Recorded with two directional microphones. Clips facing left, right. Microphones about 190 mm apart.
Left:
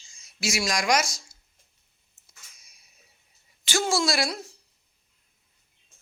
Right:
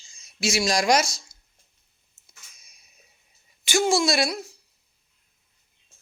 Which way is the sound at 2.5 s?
20° right (ahead or behind).